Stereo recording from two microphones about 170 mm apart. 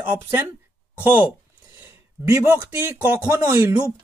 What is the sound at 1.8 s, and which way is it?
Speech, 15° right (ahead or behind).